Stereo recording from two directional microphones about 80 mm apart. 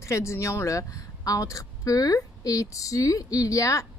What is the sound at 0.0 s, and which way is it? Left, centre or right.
Speech, left.